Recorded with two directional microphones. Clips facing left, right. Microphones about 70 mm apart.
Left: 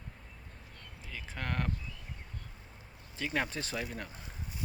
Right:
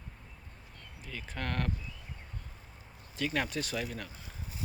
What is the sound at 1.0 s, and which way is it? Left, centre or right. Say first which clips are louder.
Speech: right 2 dB; centre.